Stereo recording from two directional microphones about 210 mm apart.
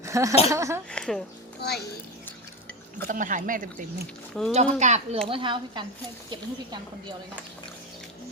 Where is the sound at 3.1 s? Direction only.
40° right (ahead or behind).